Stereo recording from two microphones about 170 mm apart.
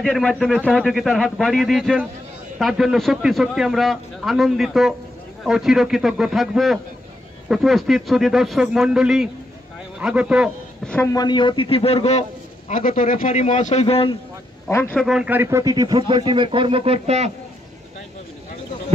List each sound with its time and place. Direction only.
0.0 s a man's voice: 5° left (ahead or behind)
11.1 s a man's voice: 25° left (ahead or behind)
14.7 s a man's voice: 15° left (ahead or behind)
15.0 s a man's voice: 5° right (ahead or behind); by 17.3 s 40° right (ahead or behind)